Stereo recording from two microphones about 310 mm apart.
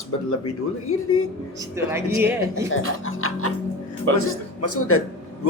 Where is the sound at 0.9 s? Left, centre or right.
Left.